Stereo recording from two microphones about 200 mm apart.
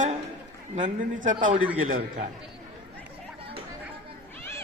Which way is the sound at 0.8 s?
40° right (ahead or behind).